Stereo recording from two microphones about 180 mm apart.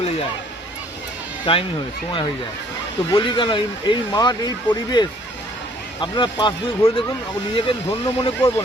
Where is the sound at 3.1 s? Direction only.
25° left (ahead or behind).